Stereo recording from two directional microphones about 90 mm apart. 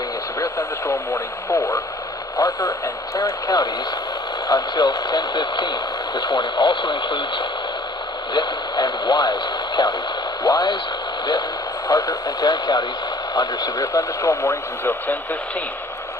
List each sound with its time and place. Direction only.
0.9 s speech: 30° left (ahead or behind)
2.4 s speech: 40° left (ahead or behind); by 7.4 s 70° left (ahead or behind)
8.3 s speech: 55° left (ahead or behind)
11.9 s speech: 45° left (ahead or behind)
14.8 s speech: 20° left (ahead or behind)